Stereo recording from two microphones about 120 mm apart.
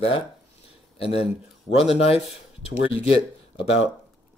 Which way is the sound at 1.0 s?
55° left (ahead or behind).